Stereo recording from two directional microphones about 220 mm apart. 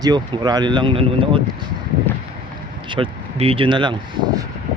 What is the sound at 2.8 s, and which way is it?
Speech, 20° right (ahead or behind).